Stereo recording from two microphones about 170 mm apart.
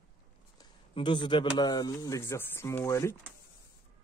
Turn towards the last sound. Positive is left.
turn(degrees=15)  # may be behind; listen again after turning